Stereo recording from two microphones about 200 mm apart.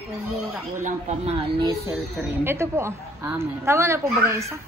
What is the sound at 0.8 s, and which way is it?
Speech, 35° right (ahead or behind).